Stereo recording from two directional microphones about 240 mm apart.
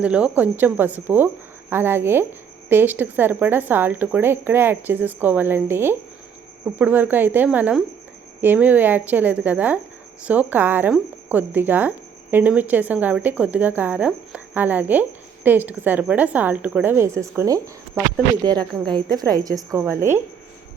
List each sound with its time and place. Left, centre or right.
0.0 s speech: centre